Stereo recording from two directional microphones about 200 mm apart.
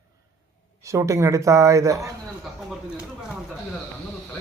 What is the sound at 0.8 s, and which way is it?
Speech, 15° right (ahead or behind).